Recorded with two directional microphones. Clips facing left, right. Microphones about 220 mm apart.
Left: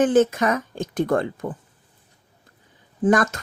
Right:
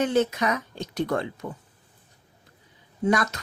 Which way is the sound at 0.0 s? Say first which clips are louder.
Left 6 dB; 50° left (ahead or behind).